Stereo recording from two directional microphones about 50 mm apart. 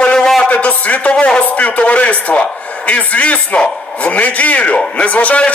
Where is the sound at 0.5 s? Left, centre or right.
Left.